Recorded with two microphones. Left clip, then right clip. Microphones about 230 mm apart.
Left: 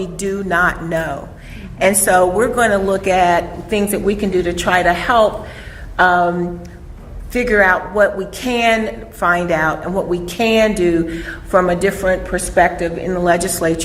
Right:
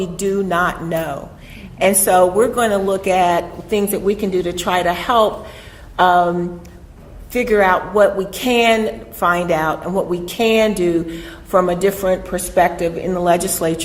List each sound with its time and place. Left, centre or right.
0.3 s a woman's voice: right
7.3 s a woman's voice: right